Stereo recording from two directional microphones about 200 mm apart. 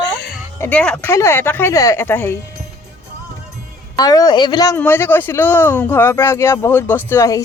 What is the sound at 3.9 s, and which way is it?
Speech, 20° left (ahead or behind).